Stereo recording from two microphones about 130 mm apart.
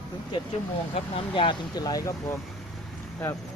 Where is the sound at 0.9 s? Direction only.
45° left (ahead or behind); by 2.1 s 30° left (ahead or behind).